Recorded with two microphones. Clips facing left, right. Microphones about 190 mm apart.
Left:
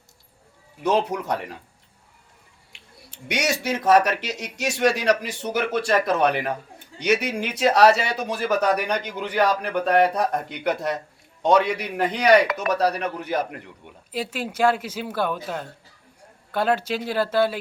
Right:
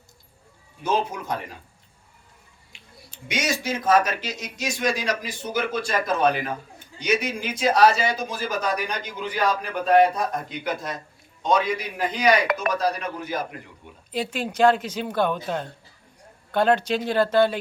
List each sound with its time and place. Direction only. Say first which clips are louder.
0.8 s speech: left 3 dB; 70° left (ahead or behind)
2.7 s speech: left 1 dB; 65° left (ahead or behind)
14.1 s speech: right 1 dB; 5° left (ahead or behind)